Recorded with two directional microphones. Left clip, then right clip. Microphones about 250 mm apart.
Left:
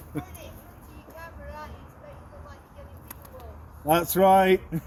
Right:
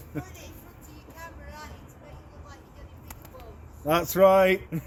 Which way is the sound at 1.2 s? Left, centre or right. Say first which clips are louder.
Left 2 dB; right.